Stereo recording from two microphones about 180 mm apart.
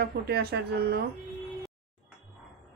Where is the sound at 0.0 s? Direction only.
65° right (ahead or behind).